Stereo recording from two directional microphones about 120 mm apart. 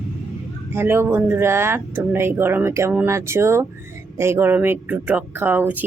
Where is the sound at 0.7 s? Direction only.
20° right (ahead or behind).